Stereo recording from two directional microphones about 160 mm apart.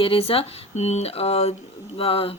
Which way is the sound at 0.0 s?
35° left (ahead or behind).